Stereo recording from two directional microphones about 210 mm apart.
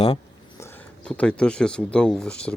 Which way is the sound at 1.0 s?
5° left (ahead or behind).